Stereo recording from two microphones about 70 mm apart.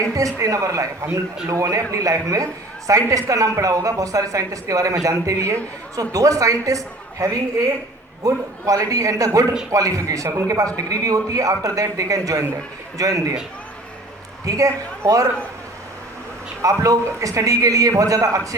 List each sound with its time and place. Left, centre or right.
0.0 s a woman's voice: right
6.0 s speech: right
10.2 s speech: right
10.8 s speech: right
14.4 s speech: right
16.6 s speech: right